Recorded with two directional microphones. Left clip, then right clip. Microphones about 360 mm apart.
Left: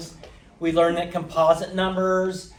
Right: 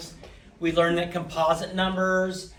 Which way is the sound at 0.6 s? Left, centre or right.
Centre.